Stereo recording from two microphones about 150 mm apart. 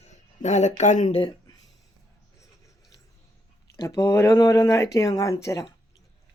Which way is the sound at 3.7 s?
20° left (ahead or behind).